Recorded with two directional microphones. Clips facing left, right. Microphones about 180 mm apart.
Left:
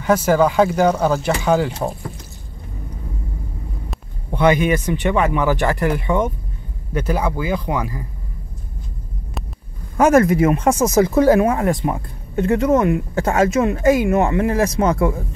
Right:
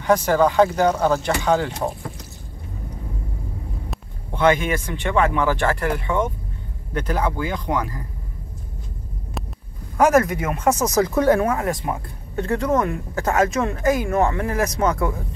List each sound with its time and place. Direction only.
0.0 s speech: 5° left (ahead or behind)
4.4 s speech: 15° left (ahead or behind)
10.0 s speech: 30° left (ahead or behind)